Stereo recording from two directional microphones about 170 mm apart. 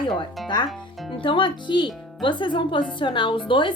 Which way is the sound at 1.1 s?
30° left (ahead or behind).